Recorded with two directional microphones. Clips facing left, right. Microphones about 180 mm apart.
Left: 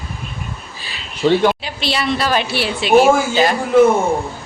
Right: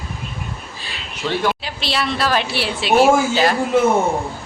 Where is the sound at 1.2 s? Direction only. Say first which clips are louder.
Left 9 dB; 30° left (ahead or behind).